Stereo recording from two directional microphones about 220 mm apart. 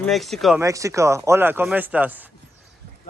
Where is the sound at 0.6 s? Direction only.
15° right (ahead or behind).